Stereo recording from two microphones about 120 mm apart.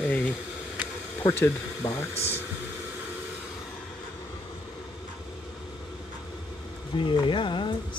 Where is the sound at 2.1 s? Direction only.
60° left (ahead or behind).